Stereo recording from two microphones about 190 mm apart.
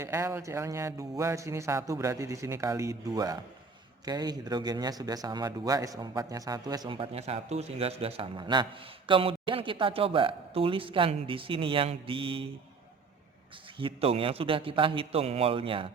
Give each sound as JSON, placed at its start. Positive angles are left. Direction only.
{"t": 0.0, "sound": "speech", "side_deg": -15}
{"t": 13.7, "sound": "speech", "side_deg": -30}